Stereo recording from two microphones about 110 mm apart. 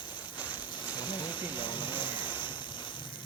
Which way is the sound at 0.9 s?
45° left (ahead or behind).